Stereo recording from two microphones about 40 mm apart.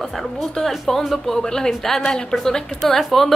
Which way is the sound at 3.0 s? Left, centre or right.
Centre.